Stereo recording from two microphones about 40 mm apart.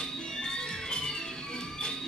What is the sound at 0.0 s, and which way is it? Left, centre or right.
Music, centre.